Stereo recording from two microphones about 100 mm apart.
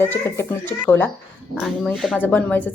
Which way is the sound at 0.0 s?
20° left (ahead or behind).